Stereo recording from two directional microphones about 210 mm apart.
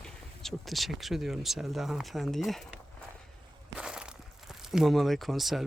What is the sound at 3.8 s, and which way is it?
Crumpling, 5° right (ahead or behind).